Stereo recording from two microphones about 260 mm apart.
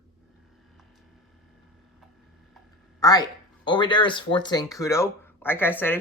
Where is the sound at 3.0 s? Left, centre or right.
Centre.